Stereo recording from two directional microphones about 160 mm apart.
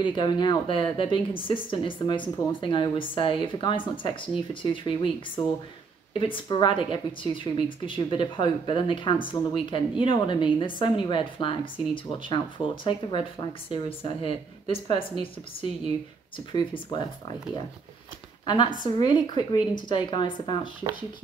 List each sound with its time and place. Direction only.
0.0 s speech: 30° left (ahead or behind)
16.5 s a woman's voice: 30° left (ahead or behind)
18.4 s a woman's voice: 30° left (ahead or behind)